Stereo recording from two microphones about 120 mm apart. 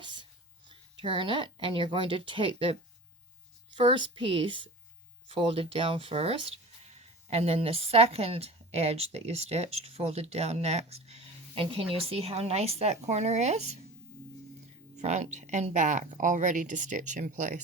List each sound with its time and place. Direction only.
0.0 s a sound: 40° right (ahead or behind)
0.7 s a woman's voice: 40° right (ahead or behind)
3.8 s a woman's voice: 45° right (ahead or behind); by 13.6 s 70° right (ahead or behind)
14.9 s speech: 75° right (ahead or behind); by 17.6 s 90° right